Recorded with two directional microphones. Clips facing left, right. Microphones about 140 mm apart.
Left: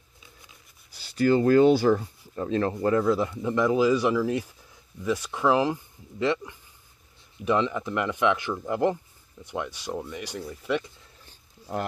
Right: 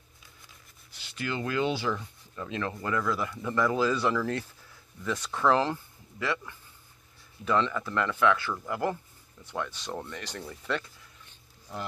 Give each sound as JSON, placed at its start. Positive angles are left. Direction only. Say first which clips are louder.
{"t": 0.9, "sound": "speech", "louder": "left 13 dB", "side_deg": 40}
{"t": 6.1, "sound": "speech", "louder": "left 6 dB", "side_deg": 25}
{"t": 11.7, "sound": "speech", "louder": "left 8 dB", "side_deg": 50}